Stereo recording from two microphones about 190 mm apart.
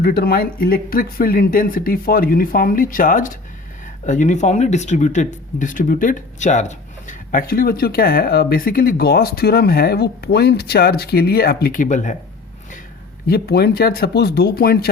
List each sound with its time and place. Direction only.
0.0 s speech: 55° left (ahead or behind)
13.2 s speech: 55° left (ahead or behind)